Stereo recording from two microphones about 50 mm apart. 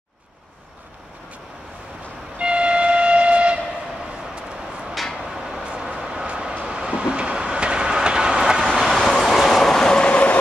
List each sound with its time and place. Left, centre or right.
2.3 s train: right
5.3 s vehicle: centre
6.6 s train: centre
8.6 s vehicle: centre
9.0 s bow-wow: centre
10.0 s vehicle: left